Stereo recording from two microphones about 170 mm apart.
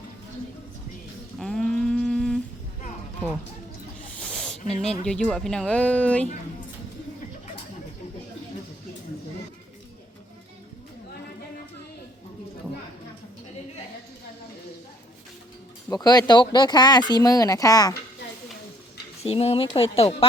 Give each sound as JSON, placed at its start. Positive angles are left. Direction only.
{"t": 1.4, "sound": "a sound", "side_deg": 5}
{"t": 4.2, "sound": "snake", "side_deg": 5}
{"t": 4.8, "sound": "speech", "side_deg": 5}
{"t": 15.9, "sound": "speech", "side_deg": 25}
{"t": 19.2, "sound": "speech", "side_deg": 35}